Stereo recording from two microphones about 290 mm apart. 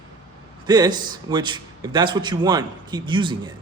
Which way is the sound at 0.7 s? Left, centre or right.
Centre.